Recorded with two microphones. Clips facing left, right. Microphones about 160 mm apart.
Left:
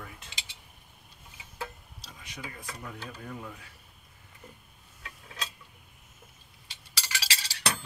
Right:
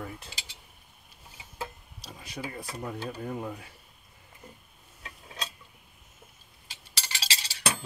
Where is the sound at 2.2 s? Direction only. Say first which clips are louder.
Right 6 dB; 35° right (ahead or behind).